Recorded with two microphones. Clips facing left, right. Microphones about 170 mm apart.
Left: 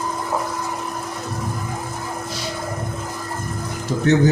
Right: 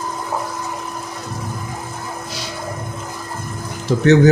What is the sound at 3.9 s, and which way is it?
Speech, 80° right.